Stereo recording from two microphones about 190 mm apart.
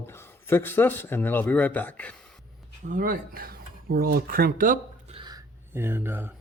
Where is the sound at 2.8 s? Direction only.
45° right (ahead or behind).